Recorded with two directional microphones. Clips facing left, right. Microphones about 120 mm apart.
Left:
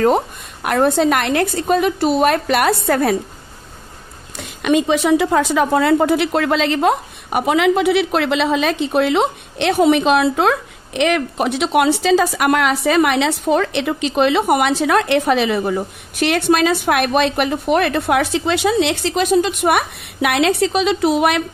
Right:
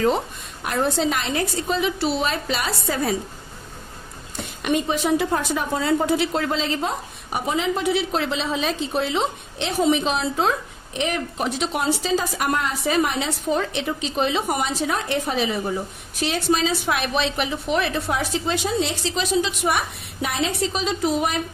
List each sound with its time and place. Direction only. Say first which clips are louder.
0.0 s a woman's voice: left 6 dB; 55° left (ahead or behind)
4.6 s speech: left 7 dB; 90° left; by 21.4 s 70° left (ahead or behind)